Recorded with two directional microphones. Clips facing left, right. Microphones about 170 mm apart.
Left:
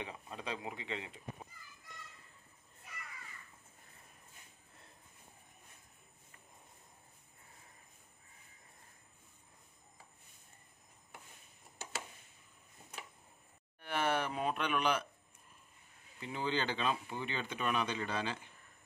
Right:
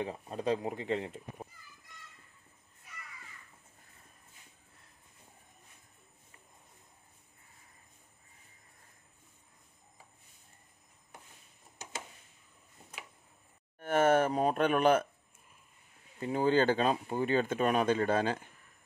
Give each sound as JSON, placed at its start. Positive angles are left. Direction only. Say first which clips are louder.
{"t": 0.0, "sound": "speech", "louder": "right 9 dB", "side_deg": -40}
{"t": 13.7, "sound": "speech", "louder": "right 9 dB", "side_deg": -45}
{"t": 16.2, "sound": "speech", "louder": "right 10 dB", "side_deg": -45}